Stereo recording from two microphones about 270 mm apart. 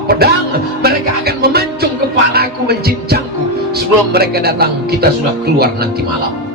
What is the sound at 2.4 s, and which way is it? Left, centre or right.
Heart sounds, right.